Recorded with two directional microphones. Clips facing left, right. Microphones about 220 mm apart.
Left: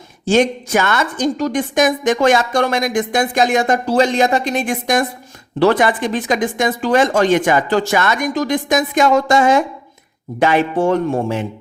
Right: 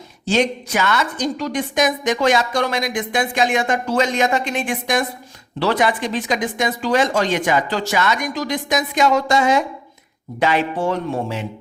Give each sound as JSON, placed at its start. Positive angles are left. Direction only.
{"t": 0.3, "sound": "a woman's voice", "side_deg": 50}